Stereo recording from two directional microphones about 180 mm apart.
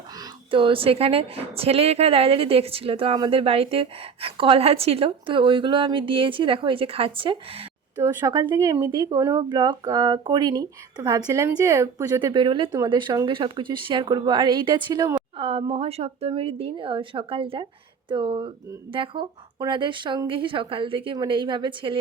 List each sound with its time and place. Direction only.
0.2 s a woman's voice: 30° right (ahead or behind)
8.0 s speech: 20° right (ahead or behind)